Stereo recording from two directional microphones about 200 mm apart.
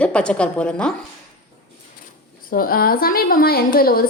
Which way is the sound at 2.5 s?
45° left (ahead or behind).